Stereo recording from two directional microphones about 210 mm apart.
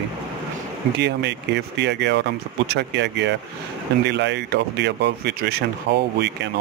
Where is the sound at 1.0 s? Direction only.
55° right (ahead or behind).